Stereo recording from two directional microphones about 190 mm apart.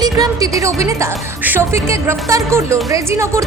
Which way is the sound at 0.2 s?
20° right (ahead or behind).